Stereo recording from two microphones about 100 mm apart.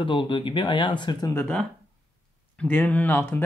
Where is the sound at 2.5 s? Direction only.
15° left (ahead or behind).